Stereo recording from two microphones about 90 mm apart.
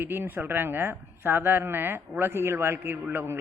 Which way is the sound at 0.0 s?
25° right (ahead or behind).